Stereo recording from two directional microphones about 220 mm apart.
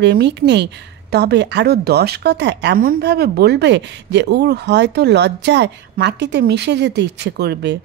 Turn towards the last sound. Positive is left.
turn(degrees=-50)  # may be behind; listen again after turning